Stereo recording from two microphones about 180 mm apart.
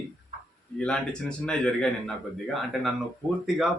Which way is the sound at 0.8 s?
5° left (ahead or behind).